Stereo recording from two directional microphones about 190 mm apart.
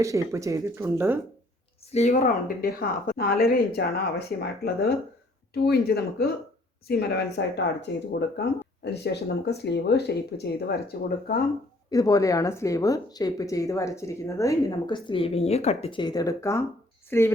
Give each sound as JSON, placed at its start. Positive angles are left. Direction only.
{"t": 0.0, "sound": "speech", "side_deg": -15}
{"t": 1.9, "sound": "speech", "side_deg": 35}
{"t": 11.9, "sound": "speech", "side_deg": 20}